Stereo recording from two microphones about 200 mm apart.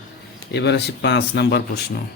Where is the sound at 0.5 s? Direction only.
60° left (ahead or behind).